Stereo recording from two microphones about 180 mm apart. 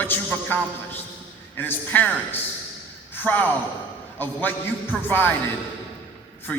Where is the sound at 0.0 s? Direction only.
10° left (ahead or behind).